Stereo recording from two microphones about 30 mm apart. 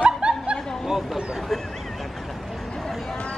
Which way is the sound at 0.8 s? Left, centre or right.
Centre.